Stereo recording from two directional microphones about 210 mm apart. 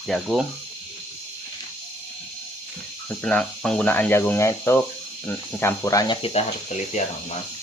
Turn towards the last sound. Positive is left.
turn(degrees=35)  # may be behind; listen again after turning